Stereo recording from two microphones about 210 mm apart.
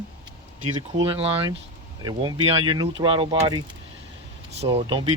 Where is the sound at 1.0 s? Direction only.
25° right (ahead or behind).